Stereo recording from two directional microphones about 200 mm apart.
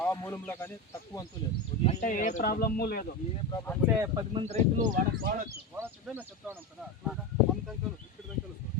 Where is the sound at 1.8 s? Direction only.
40° left (ahead or behind).